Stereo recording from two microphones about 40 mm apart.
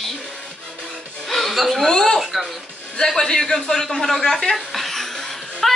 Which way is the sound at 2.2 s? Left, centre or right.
Centre.